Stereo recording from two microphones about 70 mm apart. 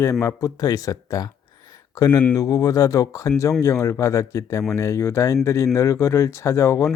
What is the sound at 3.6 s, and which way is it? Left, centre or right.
Speech, left.